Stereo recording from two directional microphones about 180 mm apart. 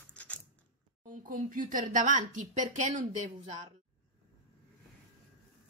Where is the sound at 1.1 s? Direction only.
45° right (ahead or behind).